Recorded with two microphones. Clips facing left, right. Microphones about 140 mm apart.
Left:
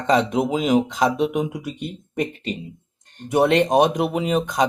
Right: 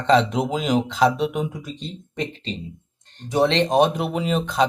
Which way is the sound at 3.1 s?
50° left (ahead or behind).